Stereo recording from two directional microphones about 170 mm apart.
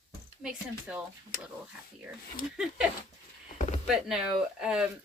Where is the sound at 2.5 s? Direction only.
5° right (ahead or behind).